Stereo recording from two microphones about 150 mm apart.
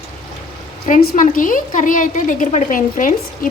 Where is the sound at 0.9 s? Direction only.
75° left (ahead or behind).